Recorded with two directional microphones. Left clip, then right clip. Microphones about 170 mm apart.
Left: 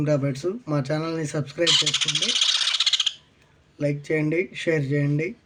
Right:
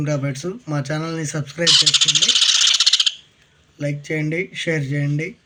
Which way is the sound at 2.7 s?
25° left (ahead or behind).